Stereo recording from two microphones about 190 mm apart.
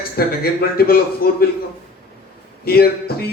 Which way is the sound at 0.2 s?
55° left (ahead or behind).